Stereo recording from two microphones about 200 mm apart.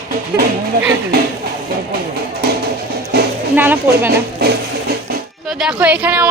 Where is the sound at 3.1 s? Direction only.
55° right (ahead or behind).